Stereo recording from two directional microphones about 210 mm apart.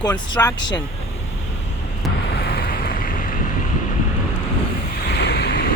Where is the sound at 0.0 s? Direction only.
20° left (ahead or behind).